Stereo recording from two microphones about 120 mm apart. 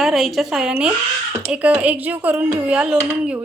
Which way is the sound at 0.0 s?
Centre (ahead or behind).